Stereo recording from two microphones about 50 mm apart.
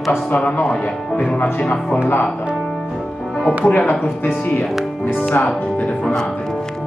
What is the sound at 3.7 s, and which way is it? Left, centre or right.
Speech, left.